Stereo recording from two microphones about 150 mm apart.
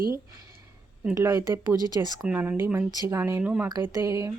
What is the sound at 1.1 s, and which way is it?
Speech, 20° right (ahead or behind).